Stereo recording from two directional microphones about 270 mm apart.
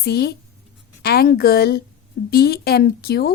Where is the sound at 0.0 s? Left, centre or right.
Left.